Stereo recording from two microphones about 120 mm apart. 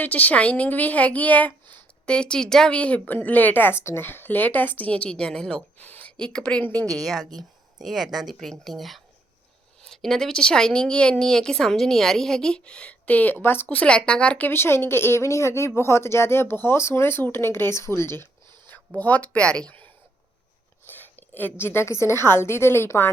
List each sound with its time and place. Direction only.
0.0 s a woman's voice: 15° left (ahead or behind)